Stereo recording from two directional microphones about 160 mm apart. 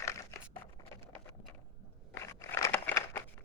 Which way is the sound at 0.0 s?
20° left (ahead or behind).